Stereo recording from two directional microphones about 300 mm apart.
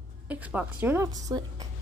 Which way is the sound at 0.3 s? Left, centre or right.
Centre.